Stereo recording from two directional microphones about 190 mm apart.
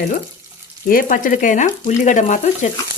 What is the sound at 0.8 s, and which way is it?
Frying, 45° left (ahead or behind).